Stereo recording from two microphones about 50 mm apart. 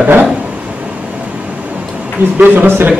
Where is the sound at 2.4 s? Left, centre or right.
Right.